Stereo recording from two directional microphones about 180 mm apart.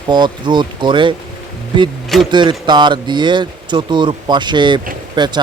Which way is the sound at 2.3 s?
25° right (ahead or behind).